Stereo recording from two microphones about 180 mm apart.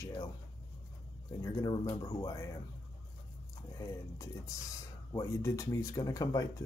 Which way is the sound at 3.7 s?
20° left (ahead or behind).